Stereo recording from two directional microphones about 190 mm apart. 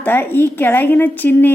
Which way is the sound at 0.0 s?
10° left (ahead or behind).